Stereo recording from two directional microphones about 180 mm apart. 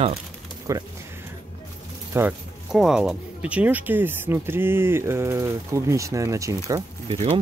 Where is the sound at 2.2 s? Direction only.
5° right (ahead or behind).